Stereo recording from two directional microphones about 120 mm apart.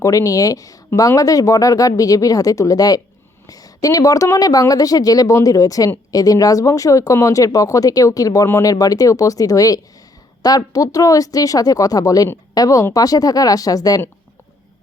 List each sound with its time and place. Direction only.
0.0 s a woman's voice: 30° left (ahead or behind)